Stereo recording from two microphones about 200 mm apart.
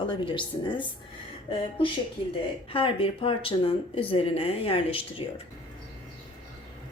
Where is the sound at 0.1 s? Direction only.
25° left (ahead or behind).